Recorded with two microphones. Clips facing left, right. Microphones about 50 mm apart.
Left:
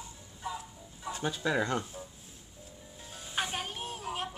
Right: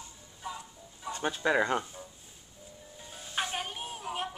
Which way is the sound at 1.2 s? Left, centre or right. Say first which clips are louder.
Right 3 dB; right.